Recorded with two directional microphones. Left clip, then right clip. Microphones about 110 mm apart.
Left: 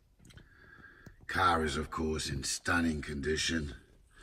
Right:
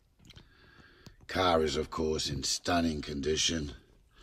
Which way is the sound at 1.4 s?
15° right (ahead or behind).